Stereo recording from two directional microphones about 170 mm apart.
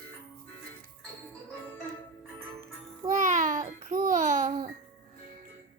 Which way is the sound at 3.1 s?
45° right (ahead or behind).